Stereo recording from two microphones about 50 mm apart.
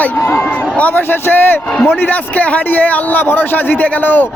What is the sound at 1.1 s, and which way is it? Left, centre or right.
Speech, left.